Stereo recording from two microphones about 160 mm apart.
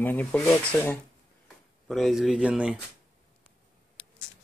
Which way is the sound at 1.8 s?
Centre (ahead or behind).